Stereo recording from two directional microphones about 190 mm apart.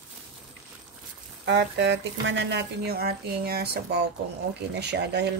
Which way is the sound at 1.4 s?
70° right (ahead or behind).